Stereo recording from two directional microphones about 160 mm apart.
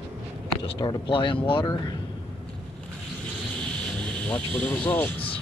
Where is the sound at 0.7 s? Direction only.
30° left (ahead or behind).